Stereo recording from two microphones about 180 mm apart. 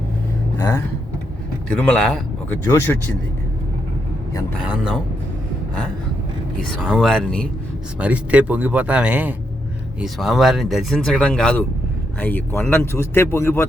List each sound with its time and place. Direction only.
0.5 s speech: 20° left (ahead or behind)
1.7 s speech: 5° left (ahead or behind)
4.6 s speech: 5° right (ahead or behind)
6.7 s speech: 5° right (ahead or behind)
7.9 s speech: 5° right (ahead or behind); by 13.7 s 15° left (ahead or behind)